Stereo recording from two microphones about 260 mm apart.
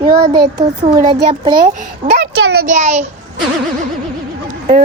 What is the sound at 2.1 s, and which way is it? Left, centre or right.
A child's voice, right.